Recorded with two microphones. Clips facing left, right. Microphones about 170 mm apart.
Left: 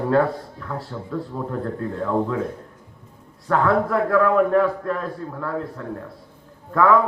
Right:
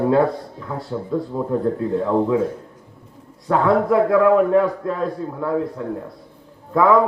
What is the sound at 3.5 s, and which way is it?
A man's voice, 20° right (ahead or behind).